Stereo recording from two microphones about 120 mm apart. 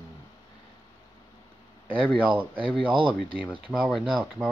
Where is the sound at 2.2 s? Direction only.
15° right (ahead or behind).